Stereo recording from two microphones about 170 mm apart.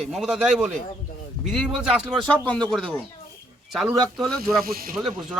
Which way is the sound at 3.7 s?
Centre (ahead or behind).